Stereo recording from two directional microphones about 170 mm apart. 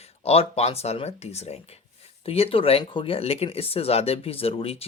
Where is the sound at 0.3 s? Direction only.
35° left (ahead or behind).